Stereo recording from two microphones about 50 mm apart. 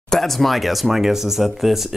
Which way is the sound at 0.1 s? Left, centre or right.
Centre.